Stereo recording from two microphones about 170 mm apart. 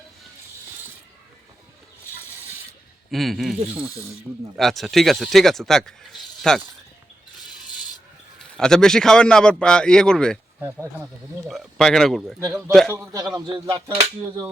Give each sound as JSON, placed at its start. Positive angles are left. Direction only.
{"t": 3.1, "sound": "speech", "side_deg": 0}
{"t": 8.4, "sound": "speech", "side_deg": 5}
{"t": 11.4, "sound": "speech", "side_deg": 0}
{"t": 13.0, "sound": "speech", "side_deg": -20}